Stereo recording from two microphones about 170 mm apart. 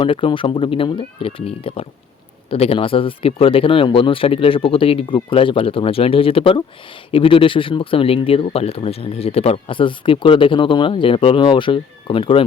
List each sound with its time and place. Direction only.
0.0 s speech: 30° left (ahead or behind)